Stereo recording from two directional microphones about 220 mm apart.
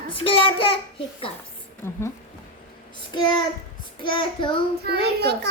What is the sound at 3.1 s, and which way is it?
A woman's voice, 20° left (ahead or behind).